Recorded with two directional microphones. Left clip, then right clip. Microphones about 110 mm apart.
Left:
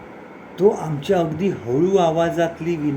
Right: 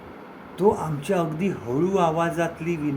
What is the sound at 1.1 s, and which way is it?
Speech, 10° left (ahead or behind).